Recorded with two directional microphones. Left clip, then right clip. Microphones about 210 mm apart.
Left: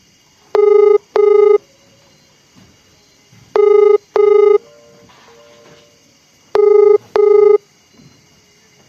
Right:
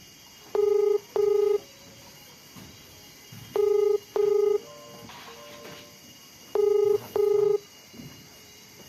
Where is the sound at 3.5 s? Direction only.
50° left (ahead or behind).